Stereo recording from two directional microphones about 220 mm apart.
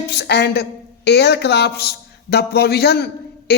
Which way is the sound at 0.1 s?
50° left (ahead or behind).